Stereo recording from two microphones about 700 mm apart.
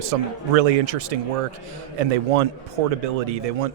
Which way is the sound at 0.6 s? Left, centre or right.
Right.